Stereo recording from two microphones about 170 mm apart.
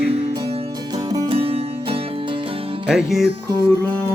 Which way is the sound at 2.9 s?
5° right (ahead or behind).